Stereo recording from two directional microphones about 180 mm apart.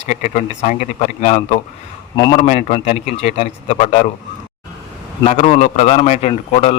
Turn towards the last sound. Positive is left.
turn(degrees=35)  # may be behind; listen again after turning